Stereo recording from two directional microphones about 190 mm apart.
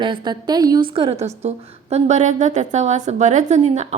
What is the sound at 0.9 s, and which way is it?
A woman's voice, 30° right (ahead or behind).